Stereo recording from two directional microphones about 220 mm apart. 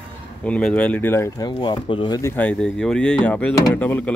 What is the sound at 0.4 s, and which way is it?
Speech, 5° left (ahead or behind).